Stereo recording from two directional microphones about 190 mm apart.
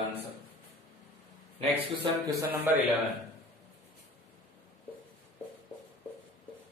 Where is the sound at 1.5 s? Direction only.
30° right (ahead or behind).